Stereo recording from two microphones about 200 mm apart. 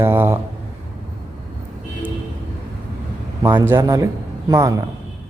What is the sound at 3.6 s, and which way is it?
Speech, 10° right (ahead or behind).